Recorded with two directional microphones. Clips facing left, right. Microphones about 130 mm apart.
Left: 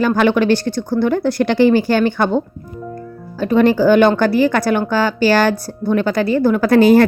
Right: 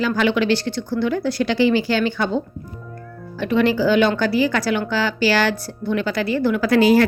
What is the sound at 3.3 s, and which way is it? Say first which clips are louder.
A woman's voice: left 5 dB; 40° left (ahead or behind).